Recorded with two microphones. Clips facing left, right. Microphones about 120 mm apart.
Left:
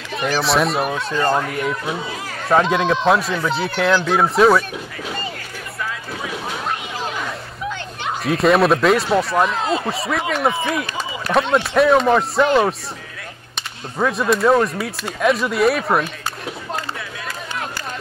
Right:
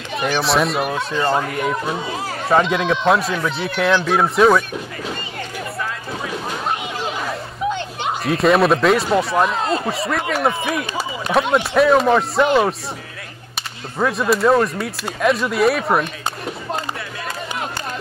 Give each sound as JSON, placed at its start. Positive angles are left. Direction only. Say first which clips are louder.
{"t": 0.1, "sound": "speech", "louder": "even", "side_deg": 0}
{"t": 8.2, "sound": "speech", "louder": "even", "side_deg": 0}
{"t": 13.9, "sound": "speech", "louder": "even", "side_deg": 0}